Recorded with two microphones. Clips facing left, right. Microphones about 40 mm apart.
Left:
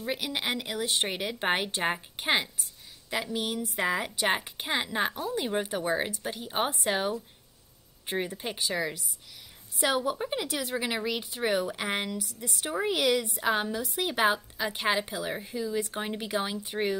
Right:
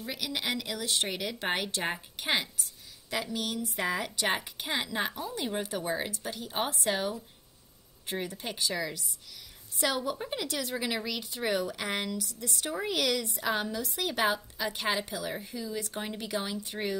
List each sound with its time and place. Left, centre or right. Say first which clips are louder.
0.0 s a woman's voice: left 3 dB; left
4.6 s a woman's voice: left 3 dB; left